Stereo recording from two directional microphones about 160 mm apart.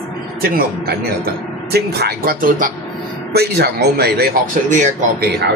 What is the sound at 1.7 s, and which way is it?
Speech, 85° right.